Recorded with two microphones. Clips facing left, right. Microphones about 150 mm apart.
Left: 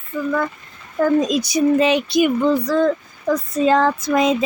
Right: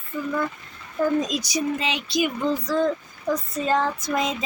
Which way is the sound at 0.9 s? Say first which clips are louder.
Left 6 dB; 75° left (ahead or behind).